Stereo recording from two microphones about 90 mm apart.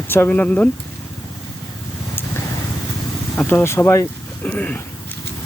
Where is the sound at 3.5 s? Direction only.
25° left (ahead or behind).